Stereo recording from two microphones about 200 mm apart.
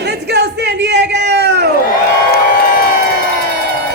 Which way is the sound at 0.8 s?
55° right (ahead or behind).